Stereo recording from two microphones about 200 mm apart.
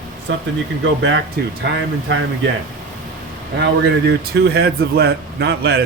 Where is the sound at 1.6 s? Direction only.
60° right (ahead or behind).